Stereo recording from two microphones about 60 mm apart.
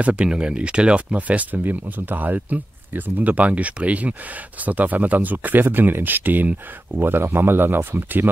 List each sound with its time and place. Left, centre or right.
0.0 s speech: centre; by 8.3 s right